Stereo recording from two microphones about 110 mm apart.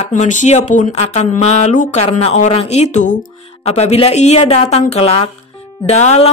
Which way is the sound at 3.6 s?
75° left (ahead or behind).